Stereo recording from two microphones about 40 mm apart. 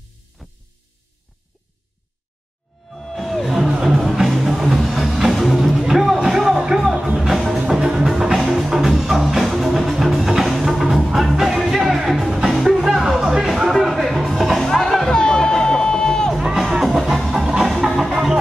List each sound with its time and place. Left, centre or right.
0.4 s music: centre
2.9 s music: centre
4.0 s music: centre
13.7 s a sound: centre
14.3 s music: centre
14.6 s music: centre
16.5 s music: centre
18.1 s music: centre